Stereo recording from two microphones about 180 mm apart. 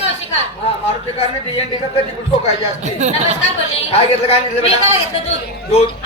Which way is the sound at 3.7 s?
35° left (ahead or behind).